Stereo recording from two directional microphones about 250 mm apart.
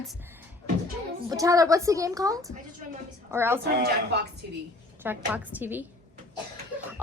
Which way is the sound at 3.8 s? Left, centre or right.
Right.